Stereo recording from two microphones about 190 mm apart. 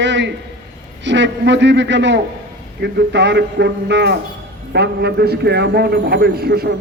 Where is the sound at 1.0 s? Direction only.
70° right (ahead or behind).